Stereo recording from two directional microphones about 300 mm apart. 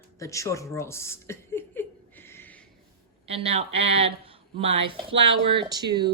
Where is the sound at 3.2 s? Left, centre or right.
Centre.